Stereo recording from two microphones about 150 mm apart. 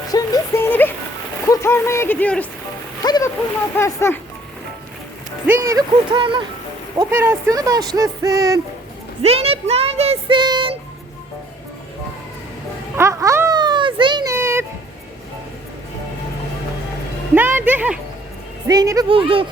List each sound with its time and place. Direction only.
0.1 s music: 15° left (ahead or behind)
1.5 s speech: 15° left (ahead or behind)
3.0 s a sound: 25° left (ahead or behind)
3.8 s speech: 15° left (ahead or behind)
5.5 s speech: 20° right (ahead or behind)
6.1 s speech: 35° right (ahead or behind)
6.9 s speech: 15° right (ahead or behind)
9.2 s speech: 40° right (ahead or behind)
13.0 s a sound: 20° right (ahead or behind)
13.6 s children playing: 30° right (ahead or behind)
14.3 s music: 15° right (ahead or behind)
17.3 s speech: 15° right (ahead or behind)
18.7 s speech: 25° right (ahead or behind)
19.0 s speech: 35° right (ahead or behind)